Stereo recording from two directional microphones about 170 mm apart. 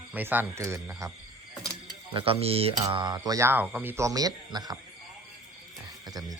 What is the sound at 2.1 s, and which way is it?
Speech, 35° right (ahead or behind).